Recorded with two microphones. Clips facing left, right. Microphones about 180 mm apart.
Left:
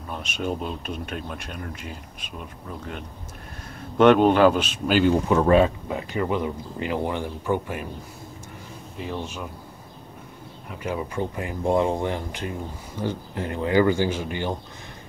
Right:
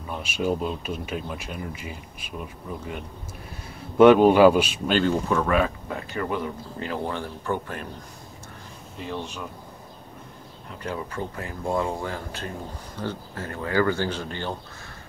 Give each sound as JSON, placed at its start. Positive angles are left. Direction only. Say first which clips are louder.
{"t": 0.1, "sound": "speech", "louder": "right 3 dB", "side_deg": -5}
{"t": 4.0, "sound": "speech", "louder": "right 2 dB", "side_deg": -5}
{"t": 4.8, "sound": "speech", "louder": "left 5 dB", "side_deg": 10}
{"t": 5.3, "sound": "speech", "louder": "left 7 dB", "side_deg": 30}
{"t": 5.9, "sound": "speech", "louder": "left 3 dB", "side_deg": 15}
{"t": 10.8, "sound": "speech", "louder": "left 4 dB", "side_deg": 10}